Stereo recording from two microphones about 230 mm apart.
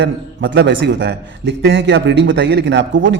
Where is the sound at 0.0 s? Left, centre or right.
Right.